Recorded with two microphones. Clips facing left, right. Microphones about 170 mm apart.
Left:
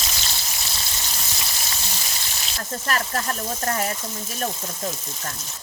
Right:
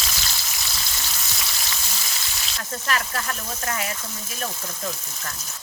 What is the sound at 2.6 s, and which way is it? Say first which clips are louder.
Speech: left 1 dB; 40° left (ahead or behind).